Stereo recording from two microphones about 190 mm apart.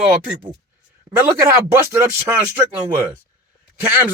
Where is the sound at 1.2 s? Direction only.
15° right (ahead or behind).